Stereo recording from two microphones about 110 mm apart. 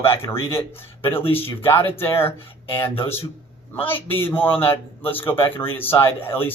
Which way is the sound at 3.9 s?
20° left (ahead or behind).